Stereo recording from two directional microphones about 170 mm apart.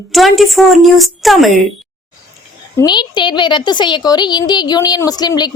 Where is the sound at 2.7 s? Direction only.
25° left (ahead or behind).